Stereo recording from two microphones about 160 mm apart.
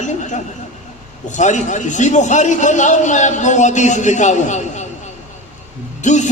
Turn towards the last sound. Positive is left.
turn(degrees=50)  # may be behind; listen again after turning